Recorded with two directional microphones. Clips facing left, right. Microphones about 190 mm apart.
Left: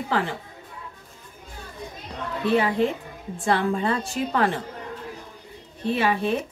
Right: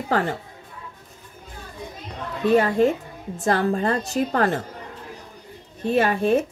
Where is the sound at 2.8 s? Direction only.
45° right (ahead or behind).